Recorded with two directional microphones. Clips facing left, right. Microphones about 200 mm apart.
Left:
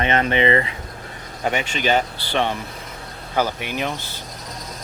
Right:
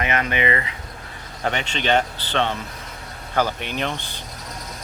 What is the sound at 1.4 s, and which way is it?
Speech, 10° left (ahead or behind).